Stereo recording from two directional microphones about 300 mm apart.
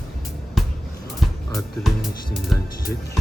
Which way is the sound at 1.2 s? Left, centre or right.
Centre.